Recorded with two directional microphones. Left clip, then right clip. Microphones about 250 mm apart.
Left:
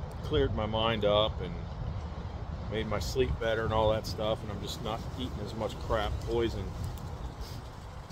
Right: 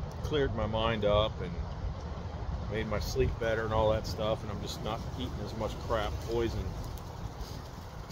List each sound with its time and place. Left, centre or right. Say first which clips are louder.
0.3 s speech: left 1 dB; left
2.7 s speech: left 1 dB; left